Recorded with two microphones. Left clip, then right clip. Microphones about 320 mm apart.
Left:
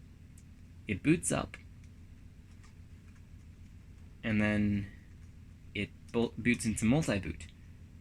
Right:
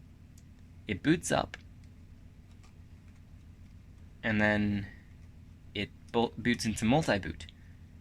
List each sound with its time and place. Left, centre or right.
0.9 s speech: right
4.2 s speech: right